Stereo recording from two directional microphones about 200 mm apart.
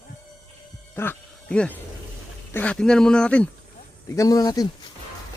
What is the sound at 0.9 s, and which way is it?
A man's voice, 10° left (ahead or behind).